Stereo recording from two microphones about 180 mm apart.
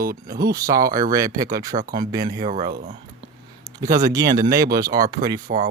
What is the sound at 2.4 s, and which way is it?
Speech, 45° right (ahead or behind).